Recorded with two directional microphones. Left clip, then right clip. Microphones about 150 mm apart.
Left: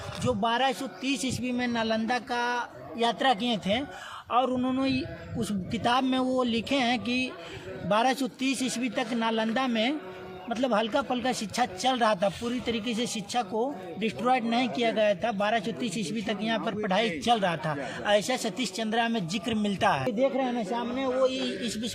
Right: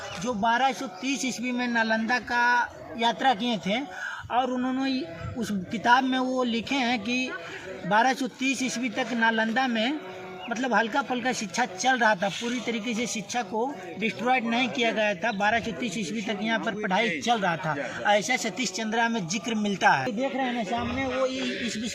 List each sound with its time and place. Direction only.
0.3 s a man's voice: 35° left (ahead or behind)
4.3 s a man's voice: 45° left (ahead or behind)
21.1 s a man's voice: 60° left (ahead or behind)